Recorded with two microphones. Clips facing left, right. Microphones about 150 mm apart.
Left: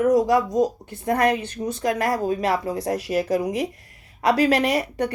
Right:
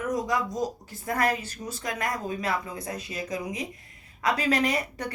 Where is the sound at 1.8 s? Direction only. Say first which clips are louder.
Left 9 dB; 30° left (ahead or behind).